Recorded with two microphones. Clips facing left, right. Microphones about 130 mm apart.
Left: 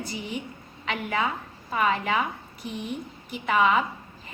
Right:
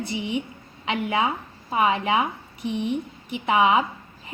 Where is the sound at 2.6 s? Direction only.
80° right.